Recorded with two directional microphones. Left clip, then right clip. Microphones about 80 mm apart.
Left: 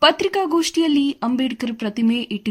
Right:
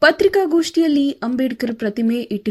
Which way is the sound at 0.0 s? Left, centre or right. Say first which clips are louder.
Right 3 dB; centre.